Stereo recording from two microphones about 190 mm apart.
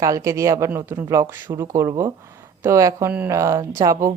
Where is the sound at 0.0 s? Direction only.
15° right (ahead or behind).